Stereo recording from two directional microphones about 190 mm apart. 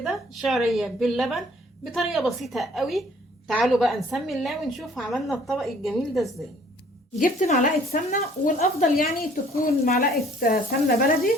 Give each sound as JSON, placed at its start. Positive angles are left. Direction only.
{"t": 0.0, "sound": "a woman's voice", "side_deg": 0}
{"t": 7.2, "sound": "speech", "side_deg": 40}